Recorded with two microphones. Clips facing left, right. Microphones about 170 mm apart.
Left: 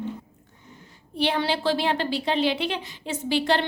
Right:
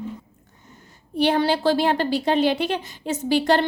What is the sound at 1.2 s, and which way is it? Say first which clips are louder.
A woman's voice: right 5 dB; 45° right (ahead or behind).